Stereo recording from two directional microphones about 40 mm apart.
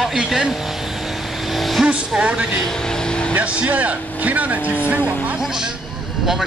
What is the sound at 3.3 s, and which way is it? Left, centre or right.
Speech, right.